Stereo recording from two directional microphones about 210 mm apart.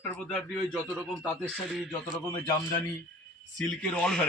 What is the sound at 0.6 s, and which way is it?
A man's voice, 5° left (ahead or behind).